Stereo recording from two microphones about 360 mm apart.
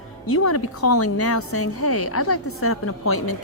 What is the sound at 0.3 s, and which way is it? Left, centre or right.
A woman's voice, left.